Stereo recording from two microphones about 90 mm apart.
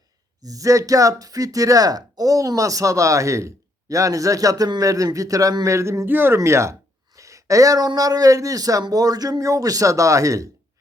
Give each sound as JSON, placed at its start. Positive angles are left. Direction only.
{"t": 0.4, "sound": "speech", "side_deg": -40}